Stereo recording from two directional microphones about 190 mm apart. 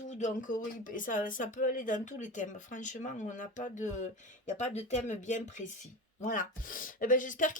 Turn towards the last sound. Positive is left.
turn(degrees=45)  # may be behind; listen again after turning